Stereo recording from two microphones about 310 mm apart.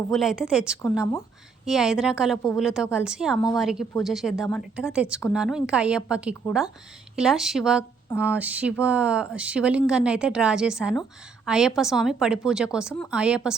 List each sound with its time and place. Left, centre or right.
0.1 s a woman's voice: centre